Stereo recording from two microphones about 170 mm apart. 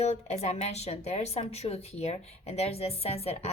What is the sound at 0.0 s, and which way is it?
A woman's voice, 40° left (ahead or behind).